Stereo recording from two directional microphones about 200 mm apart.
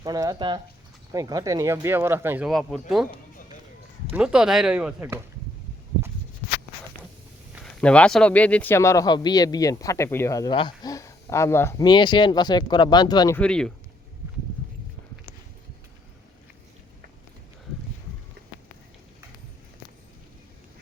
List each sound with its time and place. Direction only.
0.0 s speech: 20° right (ahead or behind)
2.5 s speech: centre (ahead or behind)
4.1 s speech: 5° right (ahead or behind)
7.5 s speech: 5° left (ahead or behind); by 13.3 s 20° left (ahead or behind)
13.3 s speech: 5° left (ahead or behind)